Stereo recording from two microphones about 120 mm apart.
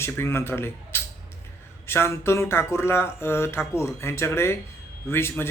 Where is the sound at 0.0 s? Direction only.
20° left (ahead or behind).